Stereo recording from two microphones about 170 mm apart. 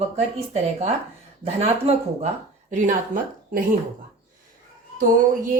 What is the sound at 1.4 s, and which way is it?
Speech, 35° right (ahead or behind).